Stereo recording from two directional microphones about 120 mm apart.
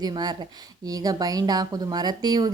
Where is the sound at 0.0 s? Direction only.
35° right (ahead or behind).